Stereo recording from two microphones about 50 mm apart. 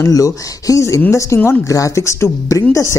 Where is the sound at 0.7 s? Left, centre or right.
Left.